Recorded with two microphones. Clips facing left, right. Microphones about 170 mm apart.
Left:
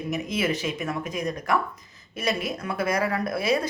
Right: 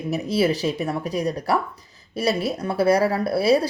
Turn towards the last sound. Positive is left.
turn(degrees=-35)  # may be behind; listen again after turning